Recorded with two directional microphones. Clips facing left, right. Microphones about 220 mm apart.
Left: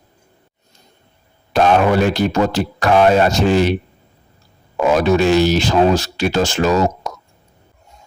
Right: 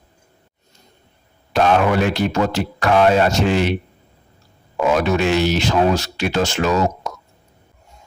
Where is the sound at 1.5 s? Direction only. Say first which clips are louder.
Left 2 dB; 35° left (ahead or behind).